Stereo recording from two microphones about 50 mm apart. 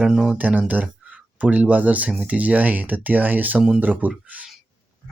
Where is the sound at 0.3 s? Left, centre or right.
Right.